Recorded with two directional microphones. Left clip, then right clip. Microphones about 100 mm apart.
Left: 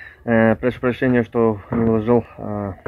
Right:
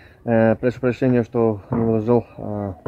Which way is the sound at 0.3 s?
30° right (ahead or behind).